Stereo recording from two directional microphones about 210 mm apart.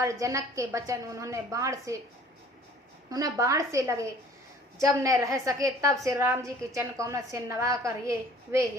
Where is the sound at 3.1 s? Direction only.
15° right (ahead or behind).